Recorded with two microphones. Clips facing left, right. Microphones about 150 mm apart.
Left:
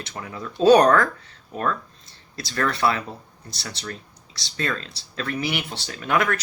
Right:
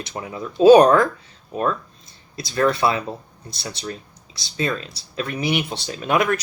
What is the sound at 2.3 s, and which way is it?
Speech, 15° right (ahead or behind).